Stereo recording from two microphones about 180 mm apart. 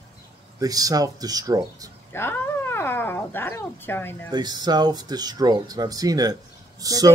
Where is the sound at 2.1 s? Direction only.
10° left (ahead or behind).